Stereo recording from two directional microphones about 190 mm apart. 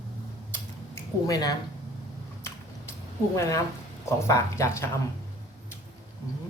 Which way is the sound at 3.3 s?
15° left (ahead or behind).